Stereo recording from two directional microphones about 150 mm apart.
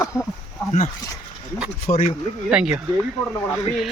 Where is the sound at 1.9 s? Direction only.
65° left (ahead or behind).